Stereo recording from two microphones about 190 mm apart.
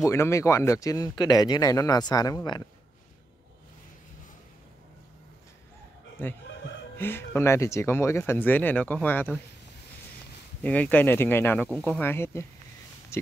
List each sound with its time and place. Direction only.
0.0 s speech: 15° left (ahead or behind)
7.0 s speech: 10° left (ahead or behind)
10.6 s speech: 10° left (ahead or behind)
13.1 s a sound: 15° left (ahead or behind)